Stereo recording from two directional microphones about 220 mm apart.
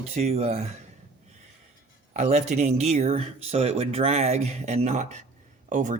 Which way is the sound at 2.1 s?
30° right (ahead or behind).